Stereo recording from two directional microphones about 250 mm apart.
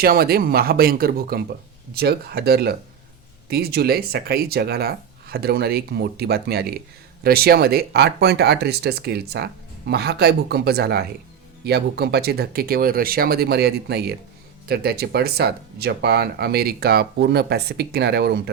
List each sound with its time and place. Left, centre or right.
0.0 s speech: right